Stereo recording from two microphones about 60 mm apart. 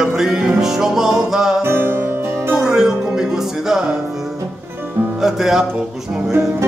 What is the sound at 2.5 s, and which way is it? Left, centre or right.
Music, centre.